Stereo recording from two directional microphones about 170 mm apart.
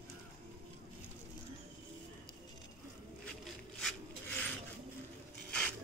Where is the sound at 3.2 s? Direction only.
Centre (ahead or behind).